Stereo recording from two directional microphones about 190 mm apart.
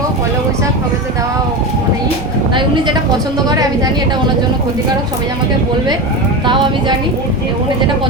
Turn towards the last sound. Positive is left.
turn(degrees=-25)  # may be behind; listen again after turning